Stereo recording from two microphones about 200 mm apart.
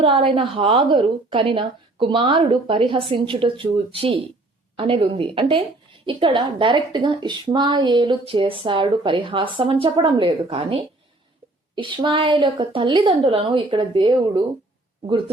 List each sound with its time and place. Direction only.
0.0 s a woman's voice: 25° right (ahead or behind)